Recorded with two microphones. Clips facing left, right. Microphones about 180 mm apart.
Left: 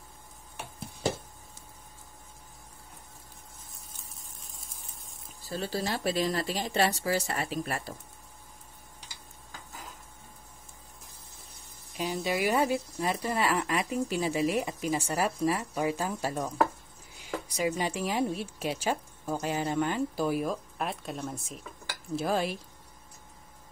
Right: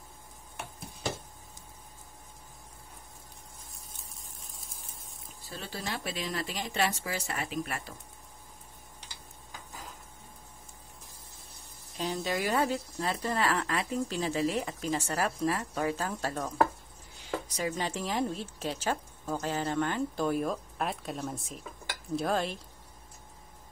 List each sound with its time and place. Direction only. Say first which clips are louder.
5.5 s speech: left 6 dB; 35° left (ahead or behind)
12.0 s speech: left 2 dB; 10° left (ahead or behind)